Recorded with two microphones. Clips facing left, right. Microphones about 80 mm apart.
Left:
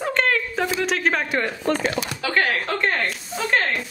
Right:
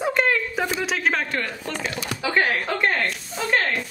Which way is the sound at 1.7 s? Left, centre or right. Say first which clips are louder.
Left 7 dB; left.